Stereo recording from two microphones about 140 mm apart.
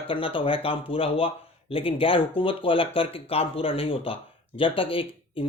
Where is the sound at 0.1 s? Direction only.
40° left (ahead or behind).